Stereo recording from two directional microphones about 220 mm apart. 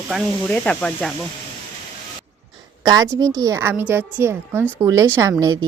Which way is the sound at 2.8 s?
15° right (ahead or behind).